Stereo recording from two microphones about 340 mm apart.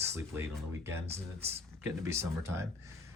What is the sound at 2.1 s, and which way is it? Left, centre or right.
Speech, centre.